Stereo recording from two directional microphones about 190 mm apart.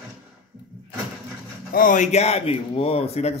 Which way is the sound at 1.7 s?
45° left (ahead or behind).